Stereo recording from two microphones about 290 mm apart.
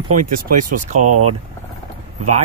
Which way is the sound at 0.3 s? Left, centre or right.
Right.